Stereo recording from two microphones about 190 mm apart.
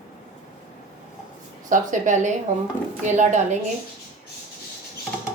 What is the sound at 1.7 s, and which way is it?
Speech, 40° right (ahead or behind).